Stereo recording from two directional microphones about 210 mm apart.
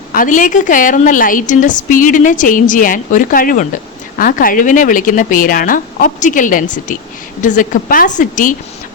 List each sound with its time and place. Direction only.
0.1 s a woman's voice: 40° left (ahead or behind)